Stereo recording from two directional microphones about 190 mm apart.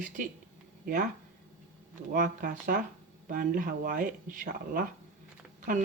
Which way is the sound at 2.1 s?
45° right (ahead or behind).